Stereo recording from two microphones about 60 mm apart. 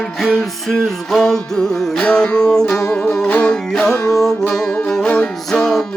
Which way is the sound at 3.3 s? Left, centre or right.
Left.